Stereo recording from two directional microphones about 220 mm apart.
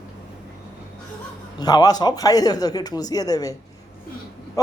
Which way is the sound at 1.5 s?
20° left (ahead or behind).